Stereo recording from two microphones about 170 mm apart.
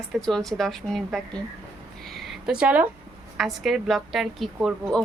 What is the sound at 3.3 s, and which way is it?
A woman's voice, centre (ahead or behind).